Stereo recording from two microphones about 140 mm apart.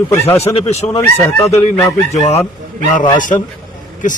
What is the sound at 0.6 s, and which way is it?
Speech, 45° left (ahead or behind).